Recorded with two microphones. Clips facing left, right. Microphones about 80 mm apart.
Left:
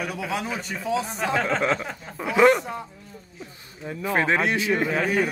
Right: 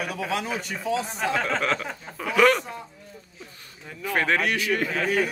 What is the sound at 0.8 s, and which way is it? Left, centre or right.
Speech, centre.